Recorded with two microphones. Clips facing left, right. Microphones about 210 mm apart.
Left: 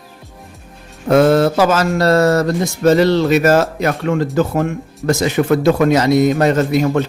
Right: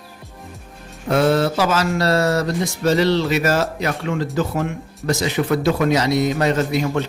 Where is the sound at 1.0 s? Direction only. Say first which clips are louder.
Left 6 dB; 45° left (ahead or behind).